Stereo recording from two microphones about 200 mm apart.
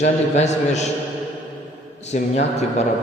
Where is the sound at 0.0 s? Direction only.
35° left (ahead or behind).